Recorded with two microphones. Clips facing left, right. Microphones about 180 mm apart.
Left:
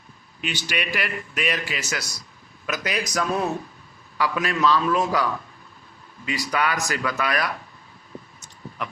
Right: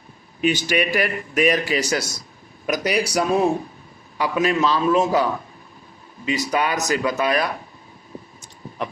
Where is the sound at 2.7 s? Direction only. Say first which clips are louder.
Right 6 dB; 10° right (ahead or behind).